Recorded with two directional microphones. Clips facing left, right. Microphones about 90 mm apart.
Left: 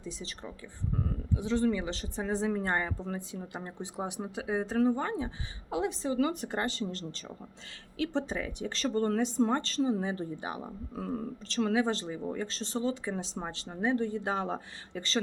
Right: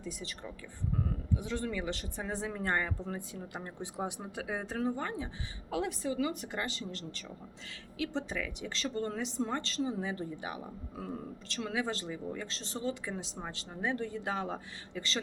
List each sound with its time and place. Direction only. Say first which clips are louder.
0.0 s speech: left 1 dB; 25° left (ahead or behind)
6.1 s speech: left 4 dB; 40° left (ahead or behind)